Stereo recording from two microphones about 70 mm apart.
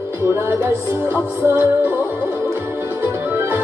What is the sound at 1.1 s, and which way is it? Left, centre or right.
Music, right.